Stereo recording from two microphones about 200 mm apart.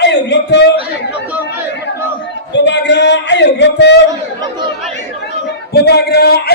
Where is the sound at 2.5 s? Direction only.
60° left (ahead or behind).